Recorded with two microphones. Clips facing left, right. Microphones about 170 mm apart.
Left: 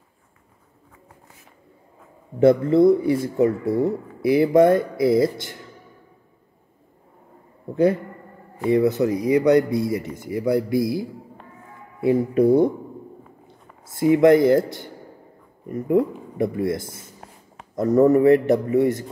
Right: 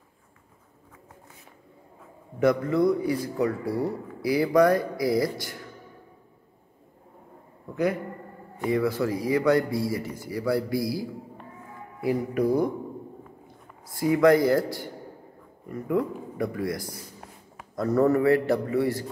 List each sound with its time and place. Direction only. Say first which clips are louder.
2.4 s speech: left 7 dB; 30° left (ahead or behind)
7.7 s a man's voice: left 7 dB; 30° left (ahead or behind)
13.8 s speech: left 5 dB; 20° left (ahead or behind)